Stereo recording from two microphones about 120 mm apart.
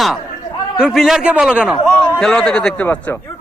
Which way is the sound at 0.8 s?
5° right (ahead or behind).